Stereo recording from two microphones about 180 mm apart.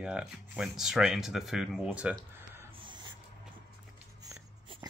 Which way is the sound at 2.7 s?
25° right (ahead or behind).